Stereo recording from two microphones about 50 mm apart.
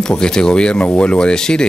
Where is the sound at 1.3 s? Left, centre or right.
Centre.